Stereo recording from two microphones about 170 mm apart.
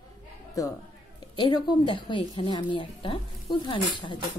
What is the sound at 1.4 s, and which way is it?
Speech, 25° left (ahead or behind).